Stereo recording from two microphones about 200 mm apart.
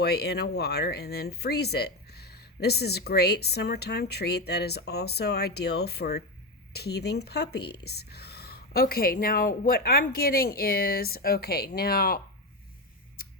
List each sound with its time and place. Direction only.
0.0 s speech: 55° left (ahead or behind)